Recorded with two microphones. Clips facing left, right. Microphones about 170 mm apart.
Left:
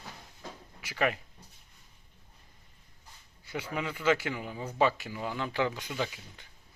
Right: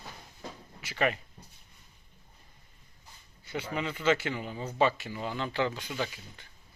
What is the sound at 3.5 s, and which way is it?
Speech, 10° left (ahead or behind).